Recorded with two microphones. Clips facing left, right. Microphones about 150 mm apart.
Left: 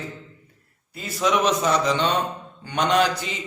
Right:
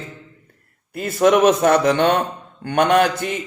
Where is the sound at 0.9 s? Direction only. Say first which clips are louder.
Right 7 dB; 55° right (ahead or behind).